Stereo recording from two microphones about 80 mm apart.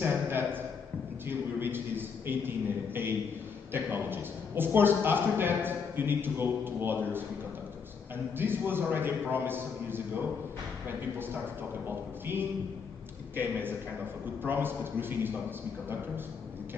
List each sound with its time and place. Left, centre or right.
0.0 s a sound: right
1.2 s a man's voice: right
8.4 s a man's voice: right
12.3 s a man's voice: right